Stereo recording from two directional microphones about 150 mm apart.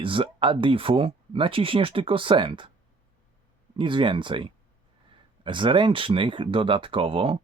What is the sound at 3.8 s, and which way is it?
Speech, 35° right (ahead or behind).